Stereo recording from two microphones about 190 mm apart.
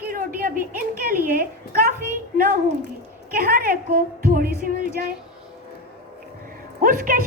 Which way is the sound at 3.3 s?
45° right (ahead or behind).